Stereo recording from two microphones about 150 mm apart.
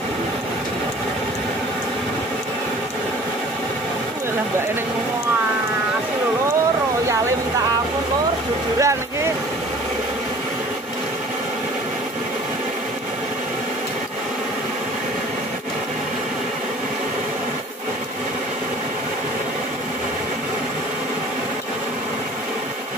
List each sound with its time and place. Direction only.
8.7 s speech: 20° right (ahead or behind)